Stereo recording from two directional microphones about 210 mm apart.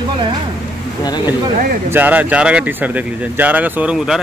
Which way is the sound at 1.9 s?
10° right (ahead or behind).